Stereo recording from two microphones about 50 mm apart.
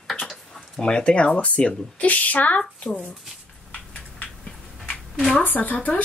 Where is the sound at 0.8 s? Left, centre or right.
Centre.